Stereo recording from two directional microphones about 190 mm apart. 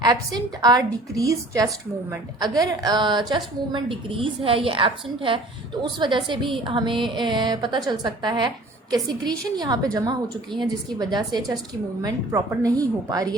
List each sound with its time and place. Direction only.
0.0 s a woman's voice: 20° right (ahead or behind)